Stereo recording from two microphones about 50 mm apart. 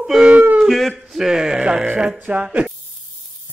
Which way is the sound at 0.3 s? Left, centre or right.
Right.